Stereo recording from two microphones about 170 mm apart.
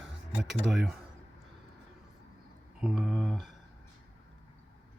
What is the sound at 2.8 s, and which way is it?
Speech, centre (ahead or behind).